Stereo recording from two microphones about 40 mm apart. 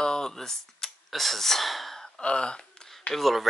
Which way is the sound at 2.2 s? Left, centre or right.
Left.